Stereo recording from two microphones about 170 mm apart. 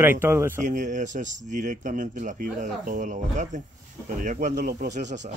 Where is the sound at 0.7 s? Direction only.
50° right (ahead or behind).